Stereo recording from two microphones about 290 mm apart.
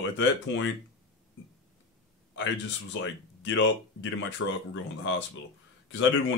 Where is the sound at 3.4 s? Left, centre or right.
Left.